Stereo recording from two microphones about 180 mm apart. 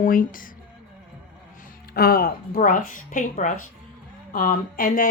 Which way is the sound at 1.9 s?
60° left (ahead or behind).